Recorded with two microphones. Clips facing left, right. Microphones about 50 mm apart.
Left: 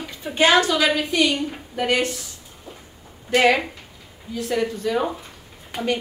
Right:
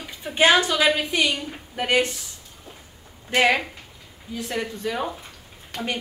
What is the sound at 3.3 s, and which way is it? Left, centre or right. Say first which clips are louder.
Speech: left 2 dB; right.